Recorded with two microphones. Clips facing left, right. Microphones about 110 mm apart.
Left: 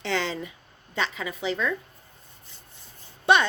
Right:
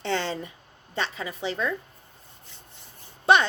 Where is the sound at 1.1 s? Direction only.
35° right (ahead or behind).